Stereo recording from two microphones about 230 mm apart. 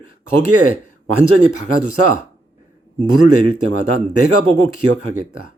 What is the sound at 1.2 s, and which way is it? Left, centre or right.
Speech, right.